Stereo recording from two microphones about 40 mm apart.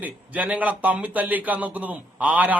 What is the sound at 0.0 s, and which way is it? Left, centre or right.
A man's voice, right.